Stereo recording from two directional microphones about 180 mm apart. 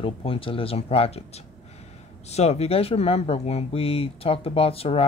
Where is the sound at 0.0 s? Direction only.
30° left (ahead or behind).